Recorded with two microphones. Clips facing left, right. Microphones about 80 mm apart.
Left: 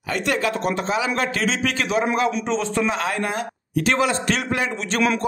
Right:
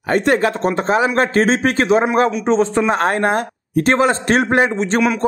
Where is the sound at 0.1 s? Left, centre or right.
Right.